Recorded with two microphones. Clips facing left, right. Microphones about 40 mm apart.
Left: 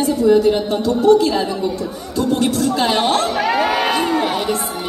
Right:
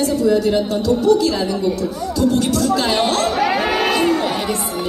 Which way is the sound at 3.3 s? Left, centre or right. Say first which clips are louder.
Even; centre.